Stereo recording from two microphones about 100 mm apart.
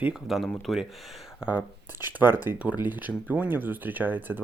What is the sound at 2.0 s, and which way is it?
Speech, 20° right (ahead or behind).